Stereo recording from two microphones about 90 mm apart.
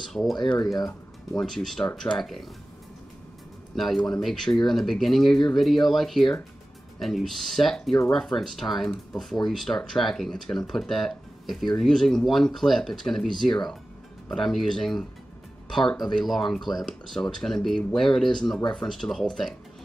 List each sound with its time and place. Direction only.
0.0 s speech: centre (ahead or behind)
0.4 s speech: 55° left (ahead or behind)
0.7 s speech: 45° left (ahead or behind)
1.4 s speech: 5° left (ahead or behind)
3.7 s speech: 5° left (ahead or behind)